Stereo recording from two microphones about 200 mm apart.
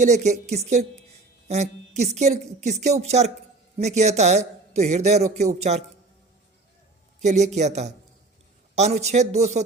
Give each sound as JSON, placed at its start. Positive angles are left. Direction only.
{"t": 0.0, "sound": "a man's voice", "side_deg": -35}
{"t": 7.2, "sound": "a man's voice", "side_deg": -35}